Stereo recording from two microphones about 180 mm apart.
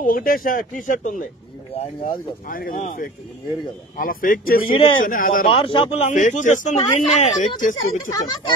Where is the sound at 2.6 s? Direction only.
45° left (ahead or behind).